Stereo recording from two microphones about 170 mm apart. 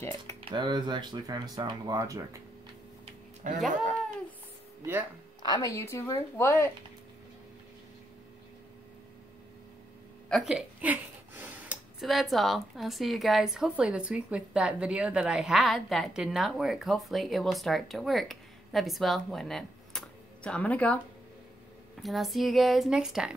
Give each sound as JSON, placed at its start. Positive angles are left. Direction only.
{"t": 0.5, "sound": "speech", "side_deg": -25}
{"t": 3.4, "sound": "speech", "side_deg": -50}
{"t": 5.4, "sound": "a woman's voice", "side_deg": 25}
{"t": 10.3, "sound": "speech", "side_deg": -5}
{"t": 22.0, "sound": "speech", "side_deg": 0}